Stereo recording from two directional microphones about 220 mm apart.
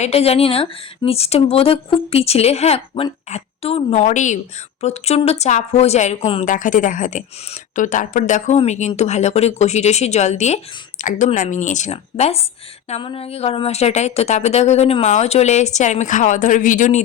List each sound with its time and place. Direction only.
0.0 s speech: 30° left (ahead or behind)